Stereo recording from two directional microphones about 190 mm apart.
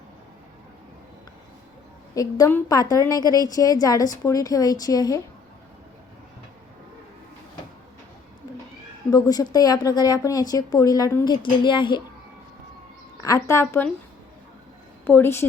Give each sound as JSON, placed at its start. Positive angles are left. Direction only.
{"t": 2.1, "sound": "a woman's voice", "side_deg": 20}
{"t": 9.0, "sound": "a woman's voice", "side_deg": 20}
{"t": 13.2, "sound": "speech", "side_deg": 15}
{"t": 15.0, "sound": "speech", "side_deg": 10}